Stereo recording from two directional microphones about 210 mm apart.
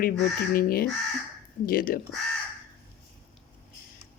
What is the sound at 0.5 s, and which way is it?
Speech, 45° left (ahead or behind).